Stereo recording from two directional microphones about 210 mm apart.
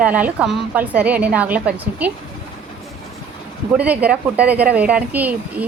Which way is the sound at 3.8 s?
5° right (ahead or behind).